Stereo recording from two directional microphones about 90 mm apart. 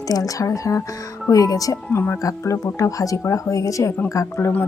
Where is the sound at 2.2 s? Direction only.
35° left (ahead or behind).